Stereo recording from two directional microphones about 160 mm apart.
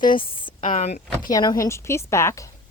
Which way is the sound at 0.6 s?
55° left (ahead or behind).